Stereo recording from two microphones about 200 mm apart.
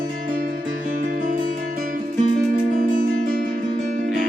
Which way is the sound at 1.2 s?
40° right (ahead or behind).